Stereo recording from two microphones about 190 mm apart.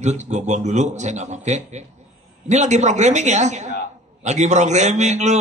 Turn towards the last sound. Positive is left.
turn(degrees=-40)  # may be behind; listen again after turning